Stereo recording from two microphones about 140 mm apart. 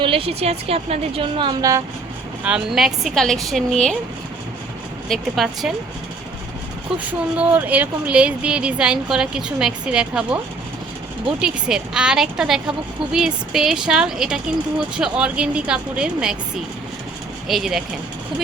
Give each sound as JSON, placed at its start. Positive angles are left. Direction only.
{"t": 0.0, "sound": "a woman's voice", "side_deg": -40}
{"t": 2.4, "sound": "a woman's voice", "side_deg": -5}
{"t": 5.0, "sound": "a woman's voice", "side_deg": 0}
{"t": 6.9, "sound": "speech", "side_deg": -10}
{"t": 11.3, "sound": "a woman's voice", "side_deg": -5}
{"t": 17.5, "sound": "a woman's voice", "side_deg": 0}